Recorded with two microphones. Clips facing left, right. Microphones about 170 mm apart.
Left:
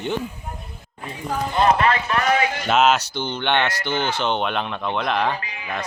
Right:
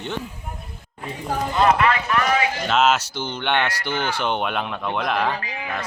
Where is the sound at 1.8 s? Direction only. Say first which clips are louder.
Even; 35° left (ahead or behind).